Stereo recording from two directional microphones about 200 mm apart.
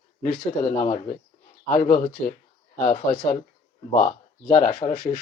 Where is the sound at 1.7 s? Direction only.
45° left (ahead or behind).